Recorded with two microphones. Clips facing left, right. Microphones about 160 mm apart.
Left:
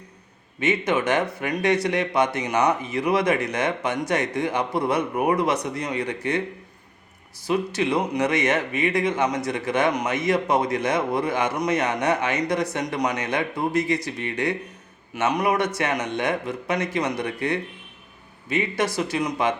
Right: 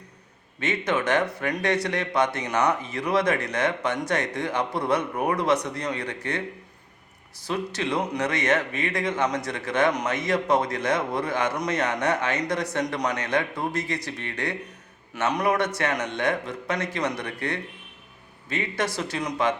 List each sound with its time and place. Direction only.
0.6 s a man's voice: 5° left (ahead or behind)
2.4 s a man's voice: 20° left (ahead or behind)
7.4 s a man's voice: 10° left (ahead or behind)
11.8 s a man's voice: 15° left (ahead or behind)